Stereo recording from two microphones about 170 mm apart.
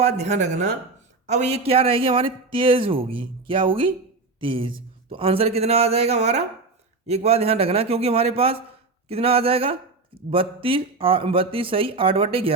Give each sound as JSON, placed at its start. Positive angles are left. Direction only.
{"t": 0.2, "sound": "a man's voice", "side_deg": -40}